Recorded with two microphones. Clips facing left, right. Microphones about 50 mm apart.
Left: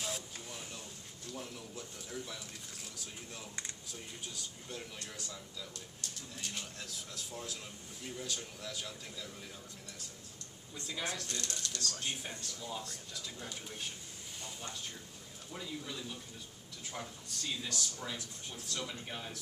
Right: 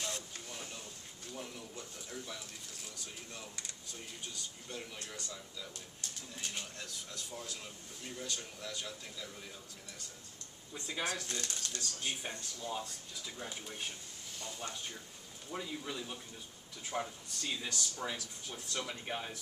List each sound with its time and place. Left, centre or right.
0.0 s a sound: centre
1.3 s speech: centre
4.3 s speech: centre
10.7 s speech: centre
15.5 s speech: centre